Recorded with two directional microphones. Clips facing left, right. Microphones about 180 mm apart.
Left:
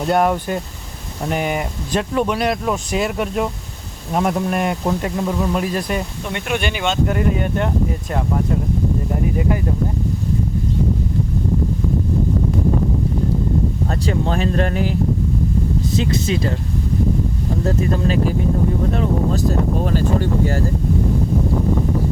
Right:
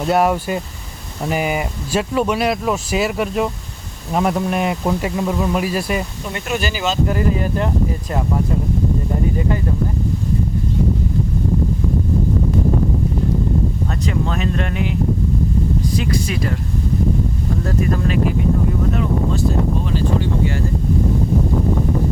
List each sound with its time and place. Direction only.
0.1 s speech: 5° right (ahead or behind)
14.1 s speech: 35° left (ahead or behind)
16.0 s speech: 25° left (ahead or behind)
17.7 s speech: 30° left (ahead or behind)
19.8 s speech: 45° left (ahead or behind)